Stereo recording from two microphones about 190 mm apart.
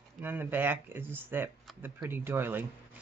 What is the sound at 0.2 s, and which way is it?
Speech, 10° right (ahead or behind).